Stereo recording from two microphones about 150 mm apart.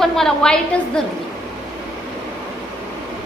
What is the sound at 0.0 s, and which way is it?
A woman's voice, centre (ahead or behind).